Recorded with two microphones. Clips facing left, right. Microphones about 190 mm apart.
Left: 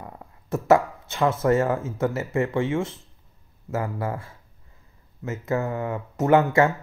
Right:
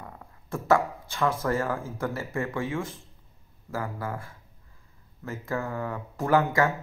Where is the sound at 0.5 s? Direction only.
25° left (ahead or behind).